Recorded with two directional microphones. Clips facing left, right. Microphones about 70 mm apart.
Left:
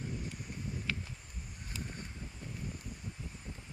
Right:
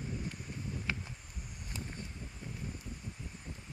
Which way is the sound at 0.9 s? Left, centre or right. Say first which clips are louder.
Right 1 dB; centre.